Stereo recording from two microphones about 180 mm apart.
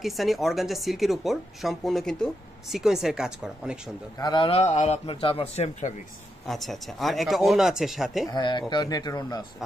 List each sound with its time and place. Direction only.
0.0 s speech: centre (ahead or behind)
4.2 s a man's voice: 25° left (ahead or behind)
6.4 s speech: centre (ahead or behind)
8.3 s speech: 25° left (ahead or behind)